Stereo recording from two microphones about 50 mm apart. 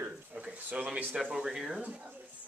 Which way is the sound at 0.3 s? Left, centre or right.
Right.